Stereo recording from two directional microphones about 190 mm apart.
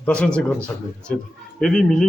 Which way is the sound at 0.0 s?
5° left (ahead or behind).